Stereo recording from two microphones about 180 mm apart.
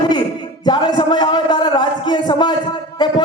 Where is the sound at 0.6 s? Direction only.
25° left (ahead or behind).